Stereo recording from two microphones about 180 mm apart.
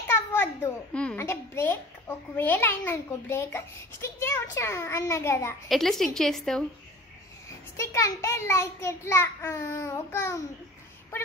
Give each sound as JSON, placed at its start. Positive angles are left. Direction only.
{"t": 0.0, "sound": "a sound", "side_deg": 15}
{"t": 0.9, "sound": "a child's voice", "side_deg": 10}
{"t": 5.7, "sound": "a woman's voice", "side_deg": 0}
{"t": 7.4, "sound": "a child's voice", "side_deg": 15}